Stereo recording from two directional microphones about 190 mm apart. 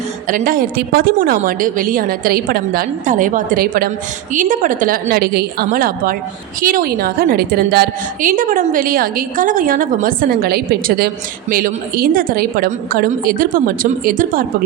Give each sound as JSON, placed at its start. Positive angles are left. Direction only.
{"t": 0.3, "sound": "a woman's voice", "side_deg": -45}